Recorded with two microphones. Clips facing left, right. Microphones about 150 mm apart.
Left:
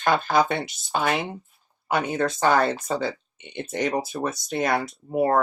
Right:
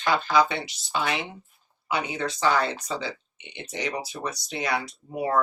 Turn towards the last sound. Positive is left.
turn(degrees=50)  # may be behind; listen again after turning